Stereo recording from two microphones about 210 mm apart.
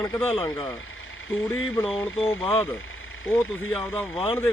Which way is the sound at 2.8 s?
70° left (ahead or behind).